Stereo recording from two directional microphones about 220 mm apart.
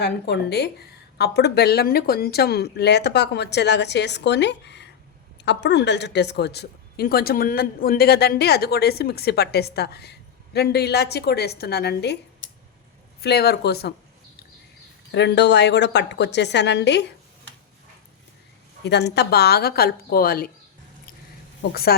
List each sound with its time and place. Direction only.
0.0 s a woman's voice: 50° left (ahead or behind)
15.1 s a woman's voice: 50° left (ahead or behind)
18.9 s a woman's voice: 50° left (ahead or behind)
21.7 s a woman's voice: 45° left (ahead or behind)